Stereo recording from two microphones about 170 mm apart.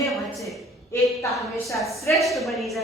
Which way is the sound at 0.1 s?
Centre (ahead or behind).